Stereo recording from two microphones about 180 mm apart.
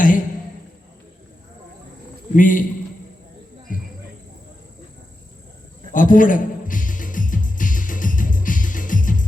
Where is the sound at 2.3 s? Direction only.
45° left (ahead or behind).